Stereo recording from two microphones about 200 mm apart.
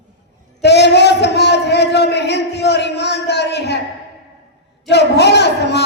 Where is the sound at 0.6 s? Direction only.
55° left (ahead or behind).